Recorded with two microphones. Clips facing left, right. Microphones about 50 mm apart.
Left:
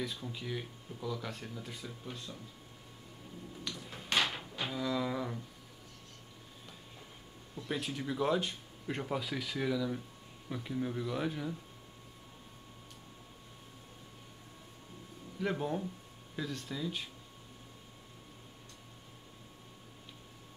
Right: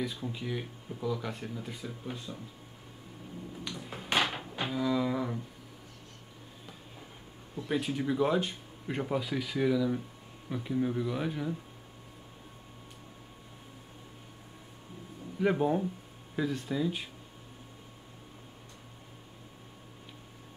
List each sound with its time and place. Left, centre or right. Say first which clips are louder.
0.2 s speech: right 4 dB; centre
3.6 s a sound: right 2 dB; centre
7.5 s speech: right 6 dB; centre
15.3 s speech: right 7 dB; centre